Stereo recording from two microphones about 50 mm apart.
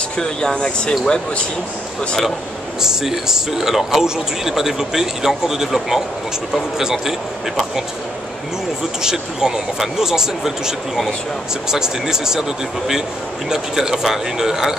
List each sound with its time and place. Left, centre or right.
0.2 s speech: centre
2.8 s speech: centre
9.0 s speech: centre